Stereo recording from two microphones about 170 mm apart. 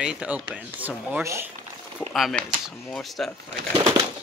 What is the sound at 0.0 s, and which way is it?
Speech, 5° right (ahead or behind).